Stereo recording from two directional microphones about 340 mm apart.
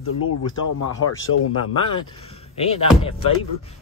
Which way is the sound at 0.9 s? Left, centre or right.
Left.